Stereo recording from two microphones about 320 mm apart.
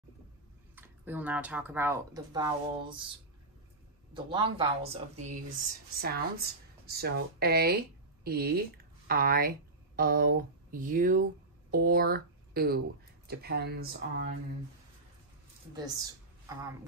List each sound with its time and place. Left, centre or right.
0.7 s speech: centre
4.1 s speech: centre
15.7 s a woman's voice: centre